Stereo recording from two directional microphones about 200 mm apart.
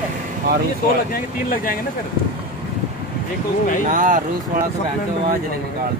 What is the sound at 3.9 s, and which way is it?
Speech, 40° right (ahead or behind).